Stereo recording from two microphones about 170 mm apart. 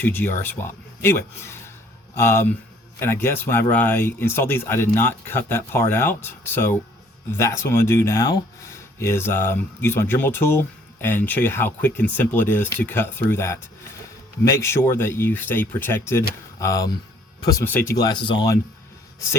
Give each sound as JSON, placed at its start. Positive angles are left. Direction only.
{"t": 0.0, "sound": "speech", "side_deg": 10}
{"t": 17.9, "sound": "speech", "side_deg": 25}